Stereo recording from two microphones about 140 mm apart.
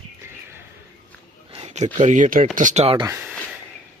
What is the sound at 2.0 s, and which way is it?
Speech, 60° right (ahead or behind).